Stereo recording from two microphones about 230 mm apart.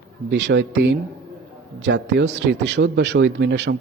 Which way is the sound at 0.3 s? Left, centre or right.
Right.